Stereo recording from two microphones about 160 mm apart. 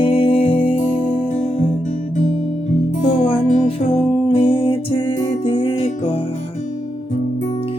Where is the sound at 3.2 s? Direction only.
45° left (ahead or behind).